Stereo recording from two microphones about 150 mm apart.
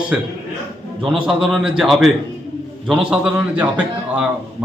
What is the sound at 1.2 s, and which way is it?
A man's voice, centre (ahead or behind).